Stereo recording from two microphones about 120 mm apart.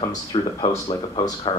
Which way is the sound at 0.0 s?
40° left (ahead or behind).